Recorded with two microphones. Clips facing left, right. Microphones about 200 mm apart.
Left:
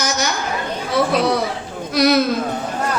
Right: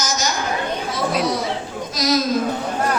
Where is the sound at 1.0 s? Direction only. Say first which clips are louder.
Left 7 dB; 60° left (ahead or behind).